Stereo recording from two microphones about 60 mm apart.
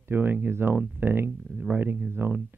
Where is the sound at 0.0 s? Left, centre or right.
Right.